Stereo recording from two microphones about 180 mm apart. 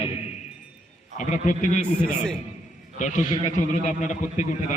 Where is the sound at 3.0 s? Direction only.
45° left (ahead or behind).